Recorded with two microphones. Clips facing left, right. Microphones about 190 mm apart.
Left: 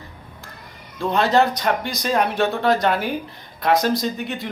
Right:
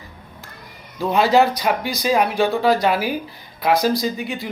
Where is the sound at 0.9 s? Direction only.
Centre (ahead or behind).